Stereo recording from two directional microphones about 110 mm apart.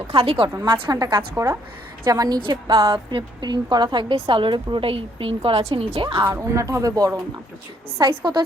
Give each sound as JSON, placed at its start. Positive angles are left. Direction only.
{"t": 0.1, "sound": "a woman's voice", "side_deg": -55}
{"t": 0.6, "sound": "a woman's voice", "side_deg": -40}
{"t": 4.1, "sound": "a woman's voice", "side_deg": -50}
{"t": 6.2, "sound": "speech", "side_deg": -25}
{"t": 7.9, "sound": "a woman's voice", "side_deg": -45}